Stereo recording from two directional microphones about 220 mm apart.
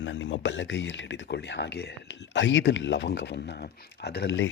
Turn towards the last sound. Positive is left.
turn(degrees=50)  # may be behind; listen again after turning